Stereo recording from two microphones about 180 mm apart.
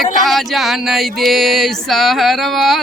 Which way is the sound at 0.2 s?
Centre (ahead or behind).